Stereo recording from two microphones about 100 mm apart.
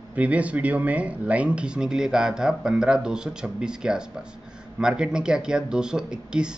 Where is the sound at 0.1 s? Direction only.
15° right (ahead or behind).